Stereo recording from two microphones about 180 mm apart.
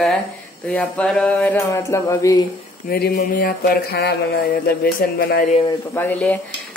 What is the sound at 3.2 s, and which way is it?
Mantra, 55° left (ahead or behind).